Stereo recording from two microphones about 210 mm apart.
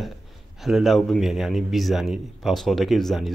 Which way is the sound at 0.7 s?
Centre (ahead or behind).